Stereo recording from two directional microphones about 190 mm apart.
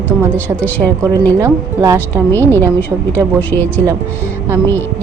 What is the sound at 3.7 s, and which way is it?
Speech, 10° right (ahead or behind).